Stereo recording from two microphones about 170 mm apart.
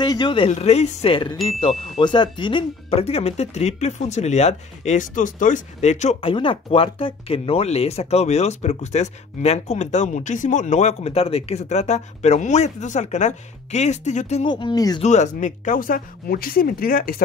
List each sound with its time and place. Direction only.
0.0 s speech: 25° left (ahead or behind)
0.5 s speech: 40° left (ahead or behind)
14.4 s speech: 30° left (ahead or behind)
15.0 s speech: 45° left (ahead or behind)